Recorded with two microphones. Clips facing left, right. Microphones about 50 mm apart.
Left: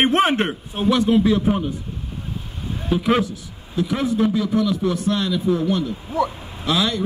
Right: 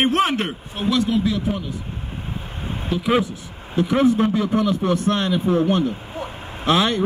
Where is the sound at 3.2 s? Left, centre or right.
Right.